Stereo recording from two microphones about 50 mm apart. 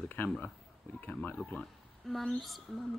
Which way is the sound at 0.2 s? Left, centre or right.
Left.